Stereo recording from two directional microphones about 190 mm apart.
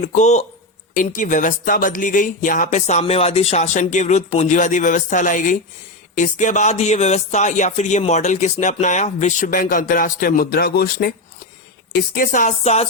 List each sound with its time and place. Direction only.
0.0 s speech: 40° left (ahead or behind); by 11.1 s 55° left (ahead or behind)
12.1 s speech: 45° left (ahead or behind)